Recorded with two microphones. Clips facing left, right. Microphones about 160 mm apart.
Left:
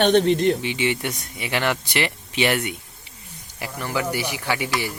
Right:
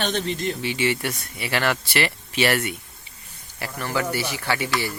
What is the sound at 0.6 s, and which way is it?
Speech, 20° left (ahead or behind).